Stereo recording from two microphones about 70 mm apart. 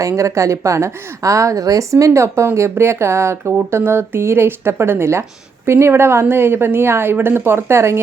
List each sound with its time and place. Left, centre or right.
0.0 s speech: right